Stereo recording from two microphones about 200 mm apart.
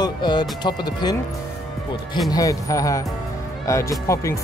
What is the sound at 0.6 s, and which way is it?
Speech, 20° left (ahead or behind).